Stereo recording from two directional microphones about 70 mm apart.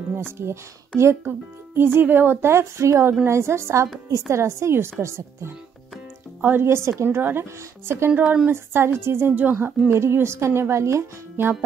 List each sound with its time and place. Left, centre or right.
0.4 s speech: right
8.1 s a woman's voice: centre
8.5 s speech: right
9.9 s speech: right